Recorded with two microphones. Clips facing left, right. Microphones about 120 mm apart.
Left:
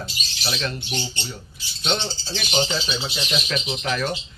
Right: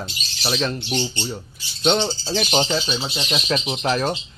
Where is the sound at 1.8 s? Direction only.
45° right (ahead or behind).